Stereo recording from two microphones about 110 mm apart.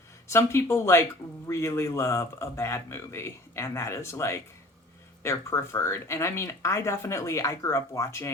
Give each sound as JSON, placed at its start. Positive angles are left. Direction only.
{"t": 0.3, "sound": "speech", "side_deg": 25}